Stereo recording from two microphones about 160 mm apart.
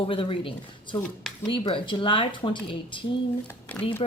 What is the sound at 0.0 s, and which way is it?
Speech, 35° left (ahead or behind).